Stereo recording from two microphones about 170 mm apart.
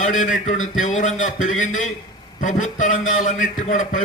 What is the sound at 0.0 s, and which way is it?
A man's voice, 50° left (ahead or behind).